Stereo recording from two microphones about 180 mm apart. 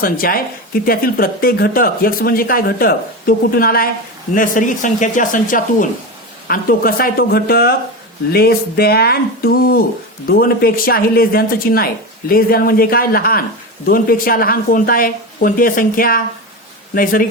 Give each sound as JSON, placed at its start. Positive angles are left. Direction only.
{"t": 0.0, "sound": "a woman's voice", "side_deg": 55}